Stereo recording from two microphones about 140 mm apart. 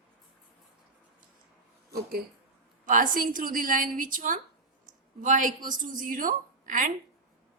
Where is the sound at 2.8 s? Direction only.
75° right (ahead or behind).